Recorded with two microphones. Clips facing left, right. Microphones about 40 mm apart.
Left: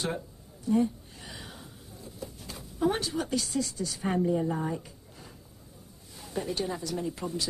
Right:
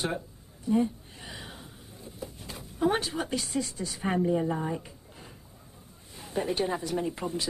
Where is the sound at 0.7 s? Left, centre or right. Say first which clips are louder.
Even; centre.